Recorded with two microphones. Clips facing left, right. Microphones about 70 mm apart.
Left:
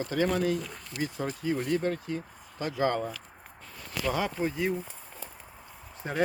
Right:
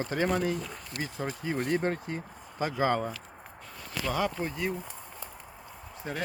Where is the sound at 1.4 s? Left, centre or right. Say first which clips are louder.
Left 1 dB; right.